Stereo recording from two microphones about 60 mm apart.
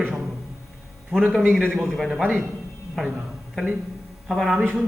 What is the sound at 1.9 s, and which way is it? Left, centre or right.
Speech, centre.